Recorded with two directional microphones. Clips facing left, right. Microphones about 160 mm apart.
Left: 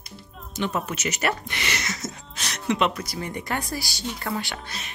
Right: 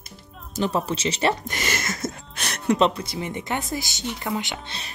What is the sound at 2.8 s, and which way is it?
Speech, 25° right (ahead or behind).